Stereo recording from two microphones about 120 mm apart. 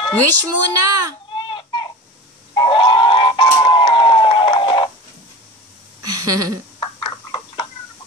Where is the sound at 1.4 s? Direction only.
40° left (ahead or behind).